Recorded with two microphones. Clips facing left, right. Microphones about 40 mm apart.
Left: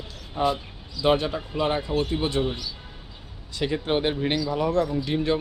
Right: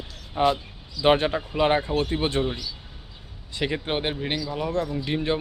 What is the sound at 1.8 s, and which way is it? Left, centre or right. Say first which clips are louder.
Speech: even; centre.